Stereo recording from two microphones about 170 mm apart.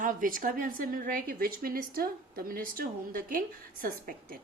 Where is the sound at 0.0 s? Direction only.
50° right (ahead or behind).